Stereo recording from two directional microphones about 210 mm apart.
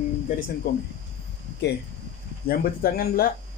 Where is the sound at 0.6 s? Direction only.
45° left (ahead or behind).